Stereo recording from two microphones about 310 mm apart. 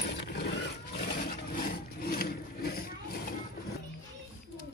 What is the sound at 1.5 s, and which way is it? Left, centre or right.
Rub, left.